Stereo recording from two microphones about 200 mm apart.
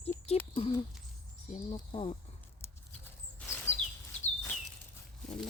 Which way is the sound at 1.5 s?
25° left (ahead or behind).